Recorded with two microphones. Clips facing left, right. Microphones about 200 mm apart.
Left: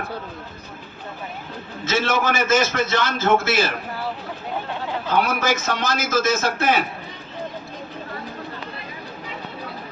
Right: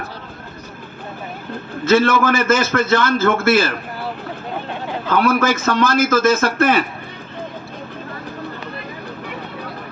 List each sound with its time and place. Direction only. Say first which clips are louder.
1.8 s a man's voice: right 7 dB; 55° right (ahead or behind)
5.0 s a man's voice: right 5 dB; 55° right (ahead or behind)